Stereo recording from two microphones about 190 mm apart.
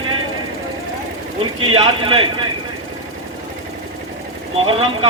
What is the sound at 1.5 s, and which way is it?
Speech, 30° right (ahead or behind).